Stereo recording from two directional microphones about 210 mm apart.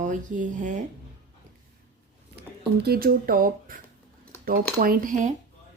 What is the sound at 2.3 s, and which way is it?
Speech, 50° right (ahead or behind).